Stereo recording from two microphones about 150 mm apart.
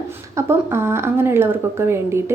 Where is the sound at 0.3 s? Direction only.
15° right (ahead or behind).